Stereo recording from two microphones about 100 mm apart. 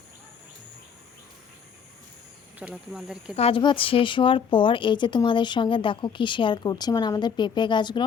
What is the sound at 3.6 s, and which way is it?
Speech, 60° left (ahead or behind).